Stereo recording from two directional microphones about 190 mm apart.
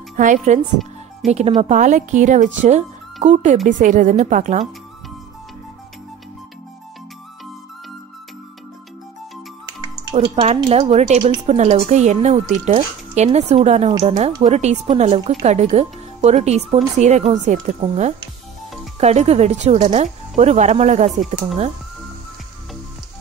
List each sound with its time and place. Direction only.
0.1 s speech: 40° right (ahead or behind)
10.2 s speech: 30° right (ahead or behind)